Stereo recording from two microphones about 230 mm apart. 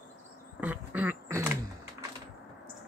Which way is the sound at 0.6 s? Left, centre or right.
Centre.